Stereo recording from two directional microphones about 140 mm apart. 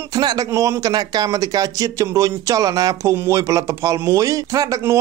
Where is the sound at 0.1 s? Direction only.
30° right (ahead or behind).